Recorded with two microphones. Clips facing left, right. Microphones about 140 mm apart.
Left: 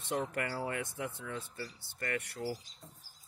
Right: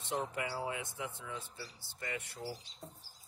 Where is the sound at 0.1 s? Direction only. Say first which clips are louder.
Left 2 dB; 55° left (ahead or behind).